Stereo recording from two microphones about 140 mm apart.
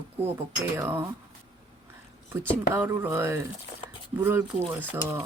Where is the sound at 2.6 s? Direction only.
15° right (ahead or behind).